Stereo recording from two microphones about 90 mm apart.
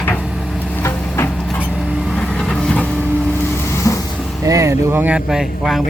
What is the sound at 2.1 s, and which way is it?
Vehicle, 10° left (ahead or behind).